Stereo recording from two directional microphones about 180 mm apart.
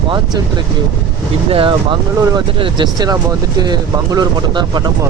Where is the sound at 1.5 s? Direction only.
30° right (ahead or behind).